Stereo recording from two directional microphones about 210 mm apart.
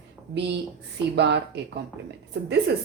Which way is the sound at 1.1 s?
55° right (ahead or behind).